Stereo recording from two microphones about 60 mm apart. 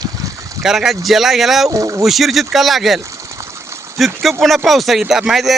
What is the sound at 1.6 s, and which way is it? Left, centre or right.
Speech, right.